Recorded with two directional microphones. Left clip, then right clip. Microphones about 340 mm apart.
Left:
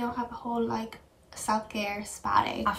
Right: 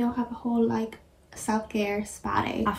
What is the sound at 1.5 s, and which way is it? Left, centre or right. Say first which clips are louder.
Speech: right 1 dB; left.